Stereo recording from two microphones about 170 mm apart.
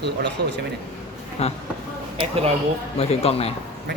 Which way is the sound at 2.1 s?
35° right (ahead or behind).